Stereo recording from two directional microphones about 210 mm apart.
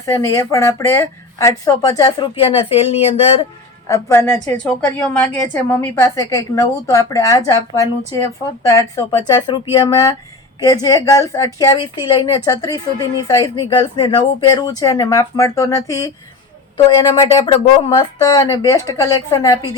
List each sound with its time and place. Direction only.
0.0 s a woman's voice: 15° left (ahead or behind)
3.8 s a woman's voice: 15° left (ahead or behind)